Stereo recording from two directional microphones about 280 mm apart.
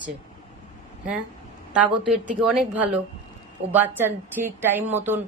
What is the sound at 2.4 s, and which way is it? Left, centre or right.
A woman's voice, centre.